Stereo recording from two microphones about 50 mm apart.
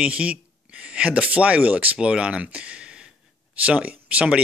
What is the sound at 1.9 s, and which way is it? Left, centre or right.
Speech, right.